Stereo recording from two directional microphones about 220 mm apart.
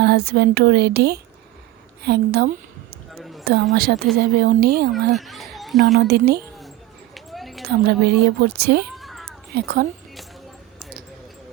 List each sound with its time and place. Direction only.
0.0 s speech: 45° right (ahead or behind)
3.2 s a sound: centre (ahead or behind)
3.8 s speech: 45° right (ahead or behind)
5.1 s a child's voice: centre (ahead or behind)
6.0 s speech: 45° right (ahead or behind)
7.1 s a sound: centre (ahead or behind)
7.7 s speech: 45° right (ahead or behind)
9.0 s a sound: centre (ahead or behind)
9.6 s speech: 45° right (ahead or behind)